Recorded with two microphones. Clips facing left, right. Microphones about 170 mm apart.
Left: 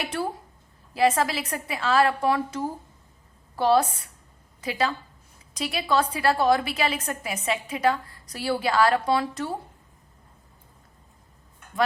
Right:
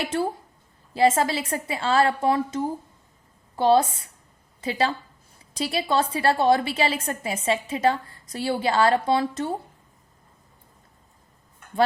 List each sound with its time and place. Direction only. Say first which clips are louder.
0.0 s a woman's voice: right 3 dB; 25° right (ahead or behind)